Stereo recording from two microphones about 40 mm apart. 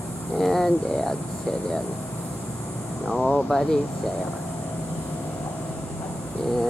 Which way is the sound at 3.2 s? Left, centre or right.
Centre.